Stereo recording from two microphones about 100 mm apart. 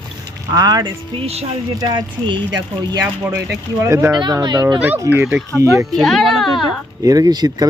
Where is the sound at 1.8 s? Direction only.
45° right (ahead or behind); by 4.1 s 30° right (ahead or behind).